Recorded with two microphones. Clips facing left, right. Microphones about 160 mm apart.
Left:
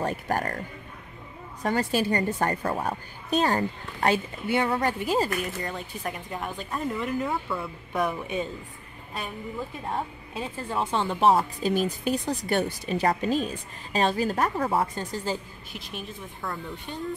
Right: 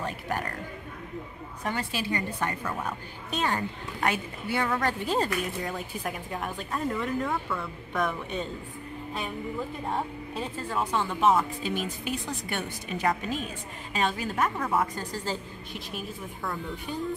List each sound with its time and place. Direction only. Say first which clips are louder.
0.0 s speech: left 5 dB; 40° left (ahead or behind)
1.6 s a woman's voice: left 7 dB; 40° left (ahead or behind); by 4.8 s 25° left (ahead or behind)
4.8 s speech: left 2 dB; 10° left (ahead or behind)
10.7 s speech: left 2 dB; 25° left (ahead or behind)
15.3 s speech: left 3 dB; 15° left (ahead or behind)
15.7 s speech: even; centre (ahead or behind)